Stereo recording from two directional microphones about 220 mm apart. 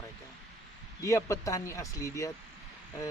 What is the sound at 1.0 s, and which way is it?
Speech, 15° left (ahead or behind).